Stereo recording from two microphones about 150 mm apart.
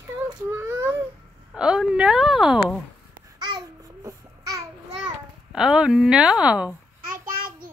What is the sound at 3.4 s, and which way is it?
Babbling, 25° right (ahead or behind).